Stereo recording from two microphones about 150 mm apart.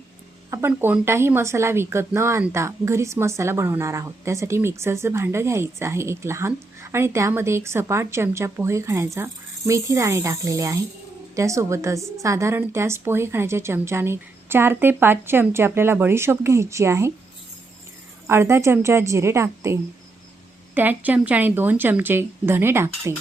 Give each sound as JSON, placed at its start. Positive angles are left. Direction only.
{"t": 0.5, "sound": "a woman's voice", "side_deg": -15}
{"t": 18.3, "sound": "a woman's voice", "side_deg": -15}